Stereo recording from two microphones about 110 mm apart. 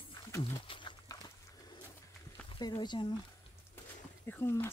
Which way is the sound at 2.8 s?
45° left (ahead or behind).